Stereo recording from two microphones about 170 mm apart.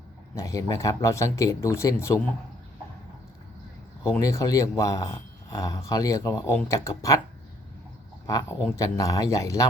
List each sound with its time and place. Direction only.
0.3 s speech: 20° left (ahead or behind)
4.0 s speech: 15° left (ahead or behind)
8.3 s speech: 20° left (ahead or behind)